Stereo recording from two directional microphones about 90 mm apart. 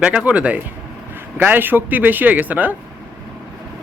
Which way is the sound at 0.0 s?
10° right (ahead or behind).